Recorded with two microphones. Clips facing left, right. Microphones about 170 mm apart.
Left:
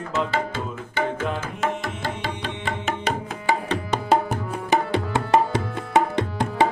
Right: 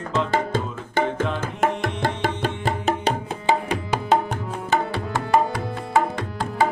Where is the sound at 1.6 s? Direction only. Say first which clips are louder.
Right 6 dB; 50° right (ahead or behind).